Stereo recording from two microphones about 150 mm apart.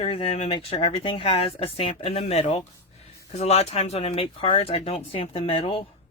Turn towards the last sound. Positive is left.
turn(degrees=35)  # may be behind; listen again after turning